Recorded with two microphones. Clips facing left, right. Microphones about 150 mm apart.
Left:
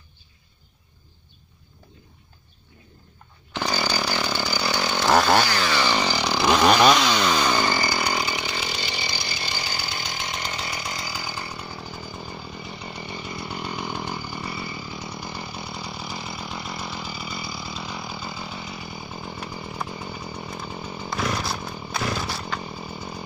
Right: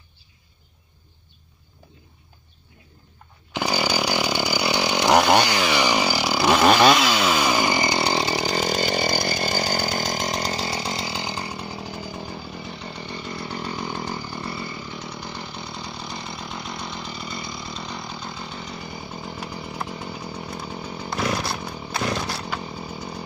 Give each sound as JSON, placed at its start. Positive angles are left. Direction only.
{"t": 3.5, "sound": "chainsaw", "side_deg": -10}
{"t": 12.8, "sound": "chainsaw", "side_deg": 5}